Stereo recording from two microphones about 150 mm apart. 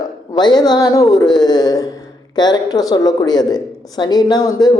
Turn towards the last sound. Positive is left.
turn(degrees=25)  # may be behind; listen again after turning